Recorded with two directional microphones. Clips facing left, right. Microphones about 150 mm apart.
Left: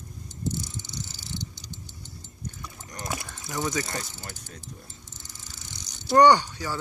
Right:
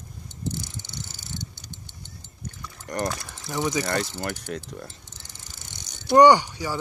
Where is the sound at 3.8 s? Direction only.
70° right (ahead or behind).